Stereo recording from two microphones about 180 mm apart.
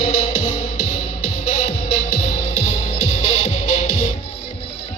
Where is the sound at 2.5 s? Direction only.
40° left (ahead or behind).